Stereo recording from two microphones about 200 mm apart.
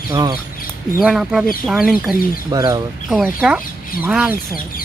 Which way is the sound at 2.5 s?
20° right (ahead or behind).